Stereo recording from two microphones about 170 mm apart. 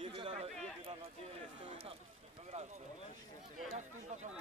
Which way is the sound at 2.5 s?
40° right (ahead or behind).